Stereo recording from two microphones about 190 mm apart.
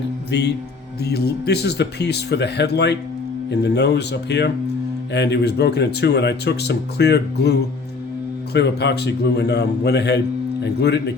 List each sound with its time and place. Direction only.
0.3 s speech: 65° left (ahead or behind)
8.5 s speech: 60° left (ahead or behind)